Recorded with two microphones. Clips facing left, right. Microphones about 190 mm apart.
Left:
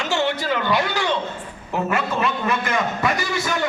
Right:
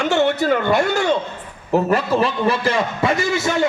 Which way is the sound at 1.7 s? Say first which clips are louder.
Right 6 dB; 35° right (ahead or behind).